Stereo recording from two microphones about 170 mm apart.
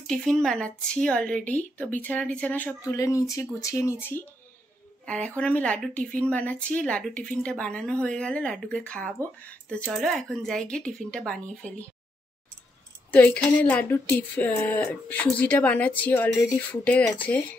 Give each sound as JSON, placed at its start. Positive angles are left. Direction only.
{"t": 0.1, "sound": "speech", "side_deg": 5}
{"t": 2.8, "sound": "speech", "side_deg": 20}
{"t": 13.1, "sound": "speech", "side_deg": 10}